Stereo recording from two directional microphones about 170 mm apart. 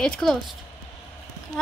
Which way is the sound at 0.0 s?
5° left (ahead or behind).